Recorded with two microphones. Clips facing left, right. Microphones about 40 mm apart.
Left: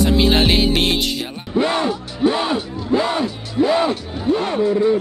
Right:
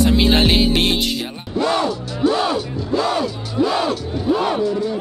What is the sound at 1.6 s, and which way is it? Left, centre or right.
Music, left.